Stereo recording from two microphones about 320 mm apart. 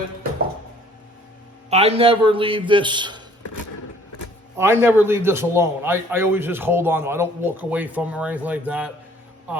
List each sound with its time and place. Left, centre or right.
1.7 s a man's voice: centre
4.5 s a man's voice: centre